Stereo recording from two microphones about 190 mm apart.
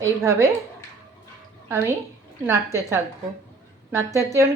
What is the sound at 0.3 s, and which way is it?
Speech, 15° right (ahead or behind).